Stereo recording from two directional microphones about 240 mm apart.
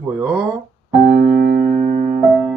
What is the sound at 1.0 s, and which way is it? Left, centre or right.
Music, right.